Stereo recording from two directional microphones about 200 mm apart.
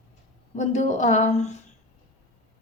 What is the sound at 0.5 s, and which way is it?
Speech, 35° left (ahead or behind).